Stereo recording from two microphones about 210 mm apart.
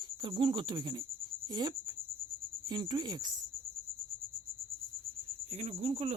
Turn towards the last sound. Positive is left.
turn(degrees=-30)  # may be behind; listen again after turning